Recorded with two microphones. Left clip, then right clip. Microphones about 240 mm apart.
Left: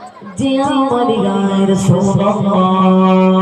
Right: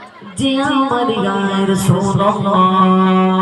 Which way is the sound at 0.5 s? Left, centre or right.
Right.